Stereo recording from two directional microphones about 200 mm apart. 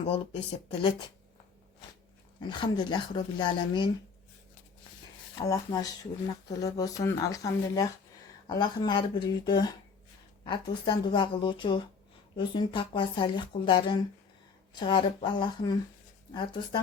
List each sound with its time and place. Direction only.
0.8 s speech: 25° left (ahead or behind)
2.4 s speech: 20° left (ahead or behind)
5.4 s speech: 20° left (ahead or behind)